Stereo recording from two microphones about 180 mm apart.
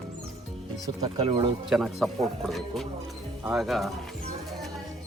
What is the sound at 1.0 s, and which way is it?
Speech, 35° right (ahead or behind).